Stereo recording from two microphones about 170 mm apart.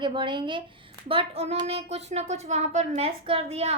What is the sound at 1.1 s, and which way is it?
A child's voice, 35° right (ahead or behind).